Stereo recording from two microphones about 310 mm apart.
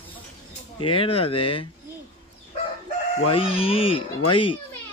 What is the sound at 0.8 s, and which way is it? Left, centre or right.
Speech, centre.